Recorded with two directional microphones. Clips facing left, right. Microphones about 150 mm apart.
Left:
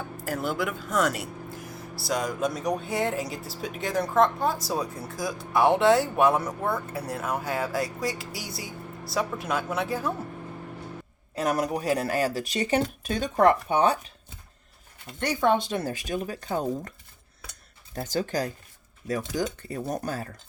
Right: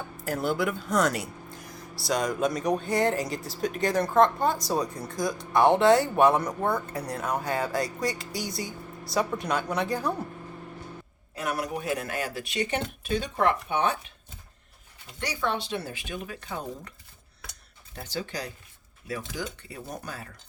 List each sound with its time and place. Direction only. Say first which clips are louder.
0.2 s speech: right 2 dB; centre (ahead or behind)
11.3 s speech: left 5 dB; 35° left (ahead or behind)
15.2 s speech: left 6 dB; 50° left (ahead or behind)
17.9 s speech: left 6 dB; 45° left (ahead or behind)